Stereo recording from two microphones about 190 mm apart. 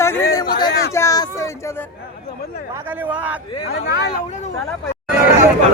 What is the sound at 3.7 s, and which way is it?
Speech, 65° left (ahead or behind).